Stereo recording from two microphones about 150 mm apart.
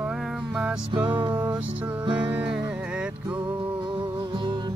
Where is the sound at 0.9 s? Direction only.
30° right (ahead or behind).